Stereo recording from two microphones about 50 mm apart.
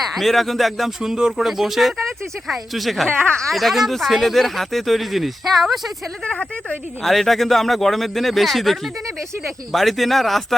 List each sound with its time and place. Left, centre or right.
0.0 s speech: centre
6.3 s speech: left
7.0 s speech: centre